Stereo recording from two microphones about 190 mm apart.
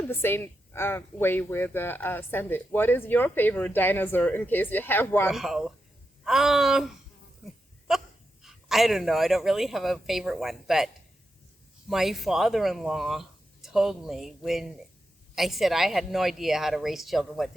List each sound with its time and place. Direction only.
0.1 s speech: 10° left (ahead or behind)
5.3 s speech: centre (ahead or behind)
7.9 s dog: centre (ahead or behind)
8.4 s speech: centre (ahead or behind)